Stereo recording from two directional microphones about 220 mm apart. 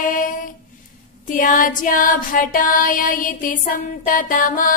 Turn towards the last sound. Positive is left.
turn(degrees=40)  # may be behind; listen again after turning